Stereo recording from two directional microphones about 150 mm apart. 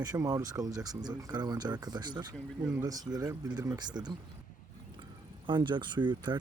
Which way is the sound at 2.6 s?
10° right (ahead or behind).